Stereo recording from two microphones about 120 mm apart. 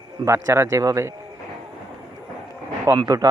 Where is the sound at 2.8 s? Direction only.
30° right (ahead or behind).